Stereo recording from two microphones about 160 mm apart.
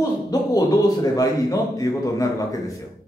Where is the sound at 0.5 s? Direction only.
25° left (ahead or behind).